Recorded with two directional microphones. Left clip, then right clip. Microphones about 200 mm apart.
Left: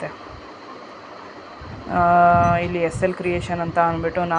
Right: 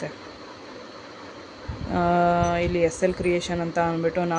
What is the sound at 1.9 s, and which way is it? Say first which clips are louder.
Speech: left 7 dB; 25° right (ahead or behind).